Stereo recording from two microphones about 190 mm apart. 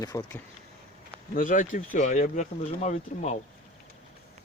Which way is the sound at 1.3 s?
45° left (ahead or behind).